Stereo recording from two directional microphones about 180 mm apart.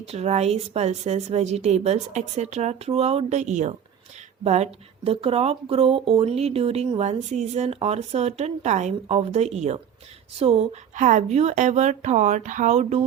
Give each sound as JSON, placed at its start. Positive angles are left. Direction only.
{"t": 0.0, "sound": "speech", "side_deg": -35}